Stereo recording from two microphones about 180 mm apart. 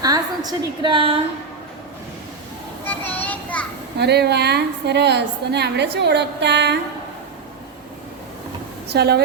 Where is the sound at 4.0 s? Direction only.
65° right (ahead or behind).